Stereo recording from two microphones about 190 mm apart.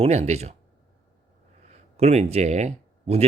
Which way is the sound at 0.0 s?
35° right (ahead or behind).